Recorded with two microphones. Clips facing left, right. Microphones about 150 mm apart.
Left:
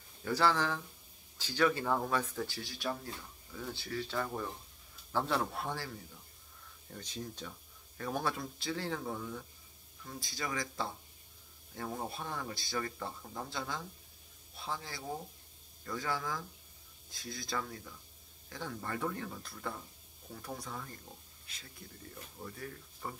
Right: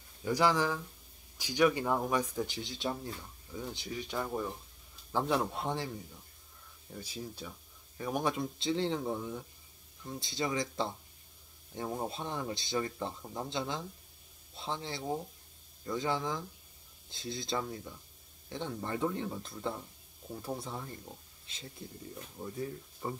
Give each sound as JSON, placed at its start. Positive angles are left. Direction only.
{"t": 0.2, "sound": "speech", "side_deg": -15}
{"t": 6.9, "sound": "speech", "side_deg": -10}